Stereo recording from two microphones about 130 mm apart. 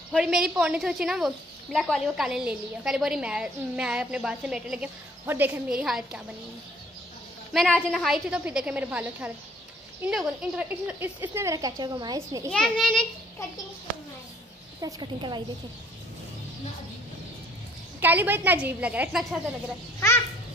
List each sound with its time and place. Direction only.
0.1 s a woman's voice: 5° right (ahead or behind)
5.7 s a woman's voice: 5° right (ahead or behind)
7.5 s a woman's voice: 5° left (ahead or behind); by 12.4 s 30° right (ahead or behind)
12.4 s a woman's voice: 5° left (ahead or behind)
14.8 s a woman's voice: 30° right (ahead or behind)
18.0 s a woman's voice: 15° right (ahead or behind)